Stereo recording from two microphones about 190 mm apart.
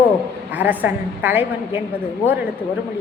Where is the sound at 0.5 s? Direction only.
10° right (ahead or behind).